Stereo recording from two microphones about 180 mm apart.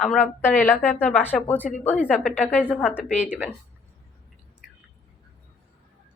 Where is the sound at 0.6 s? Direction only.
10° left (ahead or behind).